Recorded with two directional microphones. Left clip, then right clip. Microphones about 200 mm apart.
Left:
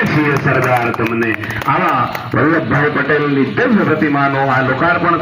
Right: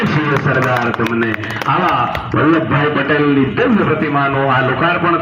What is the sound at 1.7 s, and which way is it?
A man's voice, 45° left (ahead or behind).